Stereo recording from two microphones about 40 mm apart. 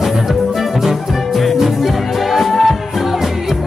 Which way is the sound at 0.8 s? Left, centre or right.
Centre.